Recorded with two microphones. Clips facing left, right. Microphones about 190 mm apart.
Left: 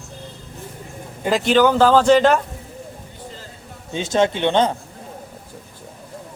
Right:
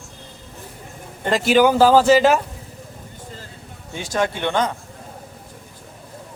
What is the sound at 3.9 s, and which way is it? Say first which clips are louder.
Speech: left 4 dB; 25° left (ahead or behind).